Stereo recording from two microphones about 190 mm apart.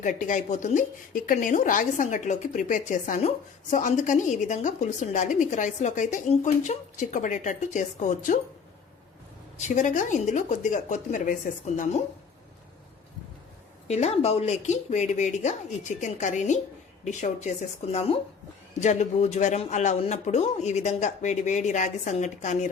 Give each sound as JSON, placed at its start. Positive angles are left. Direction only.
{"t": 0.0, "sound": "speech", "side_deg": 40}
{"t": 9.6, "sound": "speech", "side_deg": 40}
{"t": 13.8, "sound": "speech", "side_deg": 35}
{"t": 18.8, "sound": "speech", "side_deg": 40}